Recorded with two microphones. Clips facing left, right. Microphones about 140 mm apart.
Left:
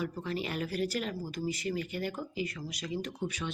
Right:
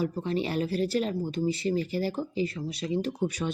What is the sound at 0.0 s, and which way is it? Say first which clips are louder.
Speech: right 6 dB; 30° right (ahead or behind).